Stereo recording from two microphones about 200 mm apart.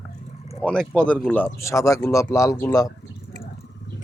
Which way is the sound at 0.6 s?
5° left (ahead or behind).